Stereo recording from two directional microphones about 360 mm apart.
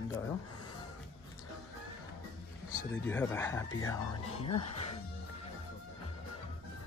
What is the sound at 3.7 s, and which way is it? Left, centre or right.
Speech, left.